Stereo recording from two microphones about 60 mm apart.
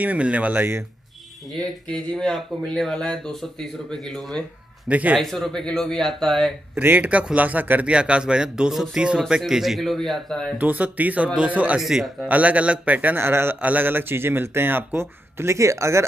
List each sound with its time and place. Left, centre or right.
0.0 s a man's voice: right
0.6 s speech: right
1.9 s speech: centre
4.8 s a man's voice: right
5.1 s speech: centre
6.7 s a man's voice: right
7.9 s a man's voice: centre
10.6 s a man's voice: right
11.8 s a man's voice: centre
12.3 s a man's voice: right
13.2 s speech: right
13.6 s speech: right